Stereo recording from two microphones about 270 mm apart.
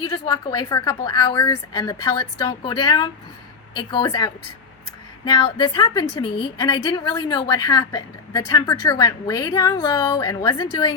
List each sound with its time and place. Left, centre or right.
0.0 s a woman's voice: centre